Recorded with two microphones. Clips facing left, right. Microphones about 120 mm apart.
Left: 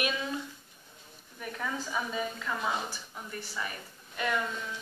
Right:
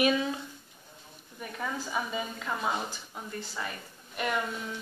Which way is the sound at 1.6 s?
15° right (ahead or behind).